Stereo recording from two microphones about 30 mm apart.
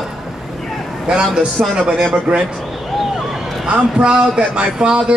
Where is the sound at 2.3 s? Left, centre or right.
Right.